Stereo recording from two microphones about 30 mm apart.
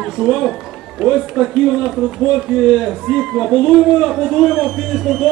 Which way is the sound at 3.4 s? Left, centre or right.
Centre.